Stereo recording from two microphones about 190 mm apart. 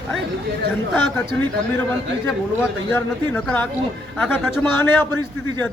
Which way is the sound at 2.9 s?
10° left (ahead or behind).